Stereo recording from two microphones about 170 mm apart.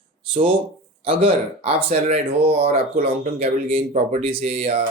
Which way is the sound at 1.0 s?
30° right (ahead or behind).